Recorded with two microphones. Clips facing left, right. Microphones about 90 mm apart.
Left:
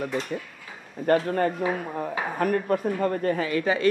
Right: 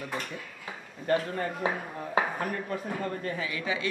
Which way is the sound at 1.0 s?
55° left (ahead or behind).